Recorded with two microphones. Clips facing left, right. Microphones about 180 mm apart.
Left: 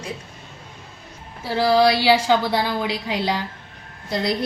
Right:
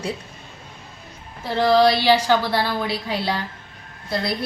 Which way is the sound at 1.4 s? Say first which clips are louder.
Right 1 dB; 10° left (ahead or behind).